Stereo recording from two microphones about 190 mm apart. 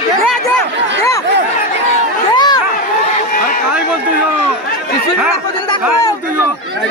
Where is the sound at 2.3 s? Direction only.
20° left (ahead or behind).